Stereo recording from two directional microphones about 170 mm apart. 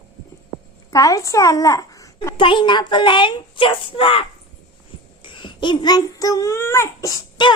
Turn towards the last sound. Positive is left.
turn(degrees=25)  # may be behind; listen again after turning